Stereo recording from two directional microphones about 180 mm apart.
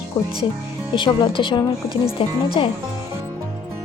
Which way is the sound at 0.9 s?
25° left (ahead or behind).